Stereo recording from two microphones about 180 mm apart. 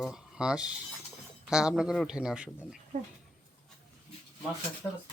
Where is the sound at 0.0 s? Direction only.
5° right (ahead or behind).